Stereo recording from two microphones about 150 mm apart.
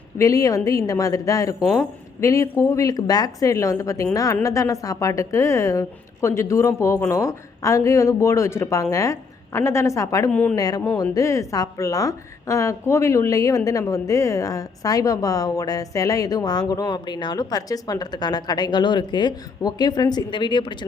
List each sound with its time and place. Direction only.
0.2 s a woman's voice: 20° left (ahead or behind)